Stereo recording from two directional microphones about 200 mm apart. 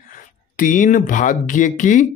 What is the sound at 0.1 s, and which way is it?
Speech, 40° left (ahead or behind).